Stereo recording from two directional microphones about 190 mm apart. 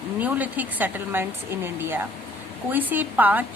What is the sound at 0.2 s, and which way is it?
A woman's voice, 10° right (ahead or behind).